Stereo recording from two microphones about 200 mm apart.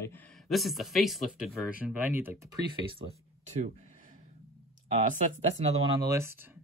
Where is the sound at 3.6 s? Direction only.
35° right (ahead or behind).